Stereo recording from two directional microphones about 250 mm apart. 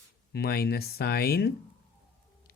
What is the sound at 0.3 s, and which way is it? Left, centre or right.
Speech, left.